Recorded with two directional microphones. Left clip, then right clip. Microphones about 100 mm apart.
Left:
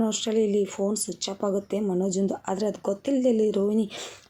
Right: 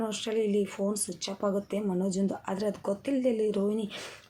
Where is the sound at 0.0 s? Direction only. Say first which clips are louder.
Left 5 dB; 60° left (ahead or behind).